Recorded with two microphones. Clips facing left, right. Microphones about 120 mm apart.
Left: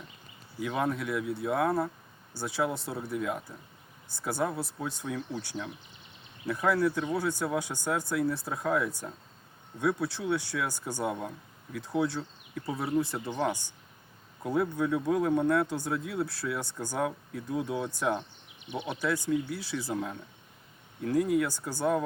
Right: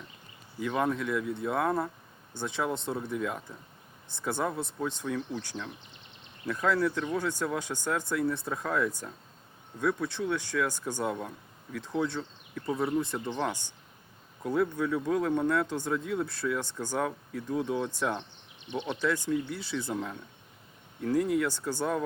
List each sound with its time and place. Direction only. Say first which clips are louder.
0.6 s speech: right 1 dB; 5° left (ahead or behind)